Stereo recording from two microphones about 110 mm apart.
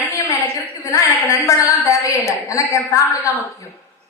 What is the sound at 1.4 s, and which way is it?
A woman's voice, 30° left (ahead or behind).